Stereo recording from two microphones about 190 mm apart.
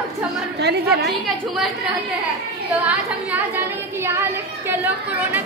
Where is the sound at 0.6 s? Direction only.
60° right (ahead or behind).